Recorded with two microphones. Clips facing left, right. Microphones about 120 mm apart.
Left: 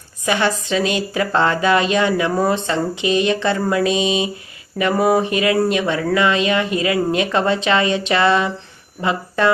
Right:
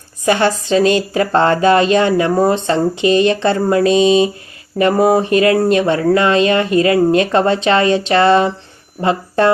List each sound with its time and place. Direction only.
0.3 s speech: 40° right (ahead or behind)